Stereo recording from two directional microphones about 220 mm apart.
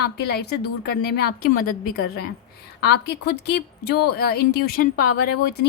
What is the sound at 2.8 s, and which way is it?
Speech, 50° left (ahead or behind).